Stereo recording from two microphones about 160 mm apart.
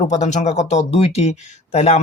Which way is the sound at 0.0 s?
45° left (ahead or behind).